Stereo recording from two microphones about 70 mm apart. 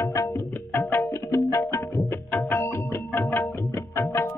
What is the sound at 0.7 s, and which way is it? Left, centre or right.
Music, left.